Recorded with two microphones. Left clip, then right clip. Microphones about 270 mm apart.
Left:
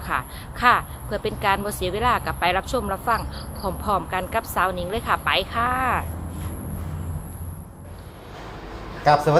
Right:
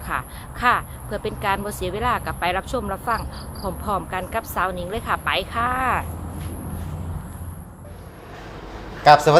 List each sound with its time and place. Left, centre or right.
0.0 s speech: centre